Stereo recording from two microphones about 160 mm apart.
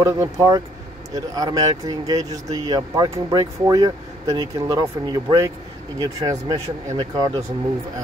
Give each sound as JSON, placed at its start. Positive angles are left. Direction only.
{"t": 0.0, "sound": "speech", "side_deg": -20}